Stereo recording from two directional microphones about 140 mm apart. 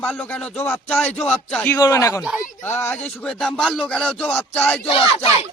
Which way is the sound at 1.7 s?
20° left (ahead or behind).